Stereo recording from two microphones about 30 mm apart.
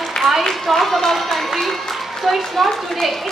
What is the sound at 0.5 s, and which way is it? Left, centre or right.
Speech, centre.